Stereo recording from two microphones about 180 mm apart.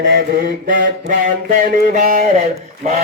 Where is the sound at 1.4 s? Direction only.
45° right (ahead or behind).